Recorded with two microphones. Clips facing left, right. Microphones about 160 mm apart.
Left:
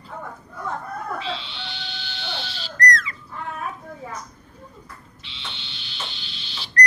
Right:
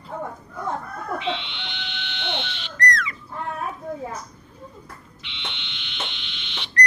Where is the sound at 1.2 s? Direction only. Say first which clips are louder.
Right 3 dB; 35° left (ahead or behind).